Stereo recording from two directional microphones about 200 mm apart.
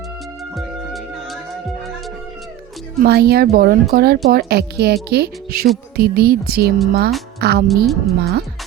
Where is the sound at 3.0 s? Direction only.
50° right (ahead or behind).